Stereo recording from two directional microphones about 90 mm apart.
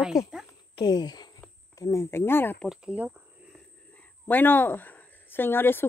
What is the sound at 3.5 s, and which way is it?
Speech, 20° left (ahead or behind).